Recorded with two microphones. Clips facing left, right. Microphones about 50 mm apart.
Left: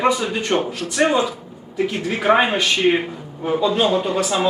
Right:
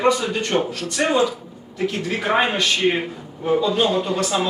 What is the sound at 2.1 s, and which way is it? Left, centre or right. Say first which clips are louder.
A man's voice: left 4 dB; centre.